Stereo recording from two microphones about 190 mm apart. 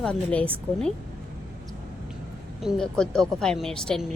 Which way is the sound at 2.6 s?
5° left (ahead or behind).